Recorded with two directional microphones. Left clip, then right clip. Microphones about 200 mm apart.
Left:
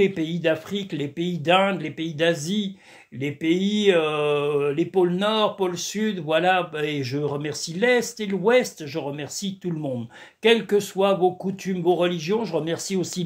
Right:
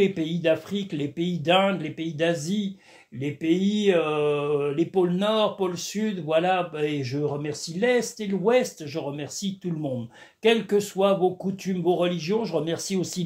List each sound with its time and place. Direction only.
0.0 s speech: 20° left (ahead or behind)